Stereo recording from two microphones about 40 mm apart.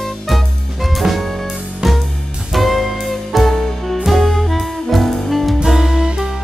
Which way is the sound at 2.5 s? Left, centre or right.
Centre.